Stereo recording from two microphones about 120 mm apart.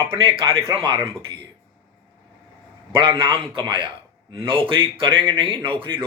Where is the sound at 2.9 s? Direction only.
45° right (ahead or behind).